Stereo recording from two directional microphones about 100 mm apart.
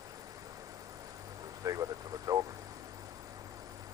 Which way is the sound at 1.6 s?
35° right (ahead or behind).